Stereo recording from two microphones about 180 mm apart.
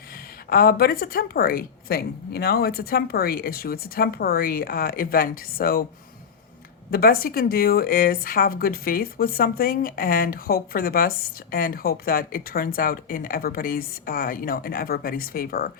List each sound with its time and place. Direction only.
0.5 s a woman's voice: 55° left (ahead or behind)
6.9 s a woman's voice: 55° left (ahead or behind)